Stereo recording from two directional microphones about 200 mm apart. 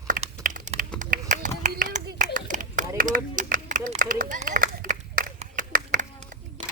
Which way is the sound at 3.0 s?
40° right (ahead or behind).